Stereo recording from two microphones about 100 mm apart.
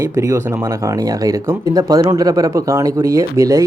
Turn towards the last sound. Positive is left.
turn(degrees=-35)  # may be behind; listen again after turning